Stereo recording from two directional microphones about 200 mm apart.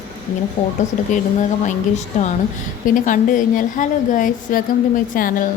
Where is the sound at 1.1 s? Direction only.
40° left (ahead or behind).